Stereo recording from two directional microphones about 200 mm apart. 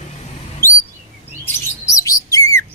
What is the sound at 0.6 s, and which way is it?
Chirp, 15° left (ahead or behind).